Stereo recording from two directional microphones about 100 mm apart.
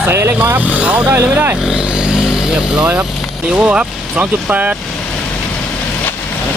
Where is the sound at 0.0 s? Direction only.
25° right (ahead or behind).